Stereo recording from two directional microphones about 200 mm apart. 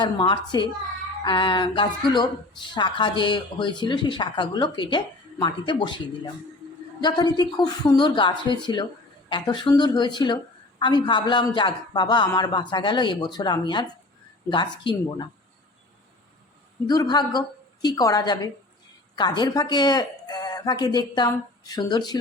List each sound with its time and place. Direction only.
0.0 s a woman's voice: 20° left (ahead or behind)
7.0 s a woman's voice: 20° left (ahead or behind)
16.8 s a woman's voice: 20° left (ahead or behind)